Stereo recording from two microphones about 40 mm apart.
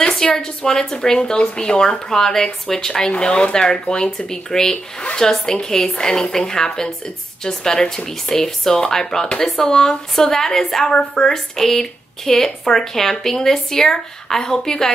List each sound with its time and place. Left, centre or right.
0.3 s a woman's voice: centre